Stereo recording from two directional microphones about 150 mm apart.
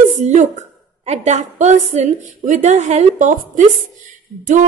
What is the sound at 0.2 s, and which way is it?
A woman's voice, 50° right (ahead or behind).